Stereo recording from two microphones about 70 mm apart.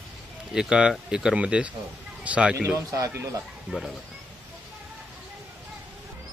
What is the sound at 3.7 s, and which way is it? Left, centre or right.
Speech, centre.